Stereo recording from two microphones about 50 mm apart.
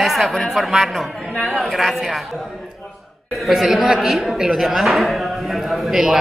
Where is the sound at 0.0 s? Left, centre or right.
Centre.